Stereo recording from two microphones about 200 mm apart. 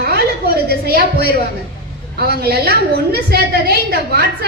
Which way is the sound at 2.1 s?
50° right (ahead or behind).